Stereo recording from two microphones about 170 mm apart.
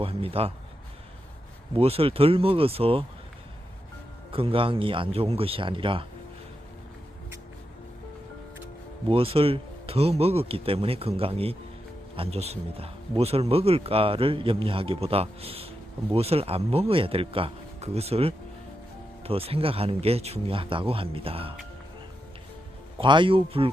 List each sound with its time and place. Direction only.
0.0 s speech: 35° right (ahead or behind)
1.7 s speech: 35° right (ahead or behind)
4.3 s speech: 35° right (ahead or behind)
9.0 s speech: 35° right (ahead or behind)
23.0 s speech: 30° right (ahead or behind)